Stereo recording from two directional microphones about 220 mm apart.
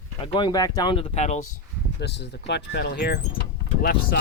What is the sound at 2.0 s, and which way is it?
Speech, 50° left (ahead or behind).